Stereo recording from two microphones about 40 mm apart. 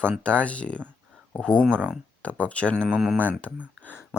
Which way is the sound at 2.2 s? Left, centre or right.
Left.